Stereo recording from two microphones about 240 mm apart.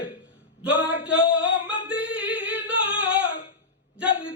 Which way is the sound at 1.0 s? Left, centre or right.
Centre.